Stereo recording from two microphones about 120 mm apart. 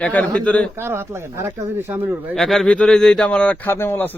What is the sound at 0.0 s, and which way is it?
Speech, 10° left (ahead or behind).